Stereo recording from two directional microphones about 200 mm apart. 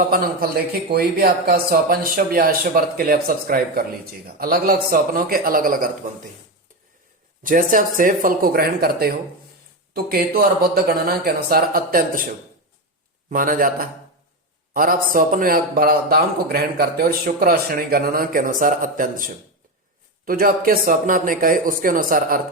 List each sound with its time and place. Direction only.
0.1 s speech: 45° right (ahead or behind)
7.4 s speech: 40° right (ahead or behind)
13.3 s speech: 45° right (ahead or behind)